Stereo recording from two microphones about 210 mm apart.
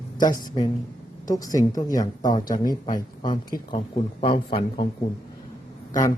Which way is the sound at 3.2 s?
20° left (ahead or behind).